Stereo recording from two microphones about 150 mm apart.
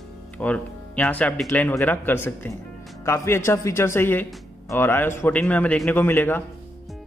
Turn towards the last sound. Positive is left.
turn(degrees=15)  # may be behind; listen again after turning